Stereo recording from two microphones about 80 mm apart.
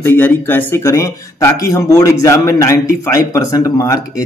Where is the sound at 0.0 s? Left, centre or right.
Left.